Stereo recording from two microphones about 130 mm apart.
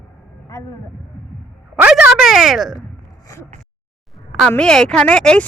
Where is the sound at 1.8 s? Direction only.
5° right (ahead or behind).